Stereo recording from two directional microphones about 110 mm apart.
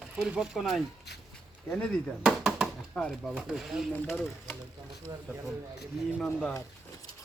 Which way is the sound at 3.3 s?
5° right (ahead or behind).